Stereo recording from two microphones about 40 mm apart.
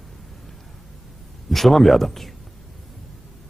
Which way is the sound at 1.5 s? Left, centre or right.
Centre.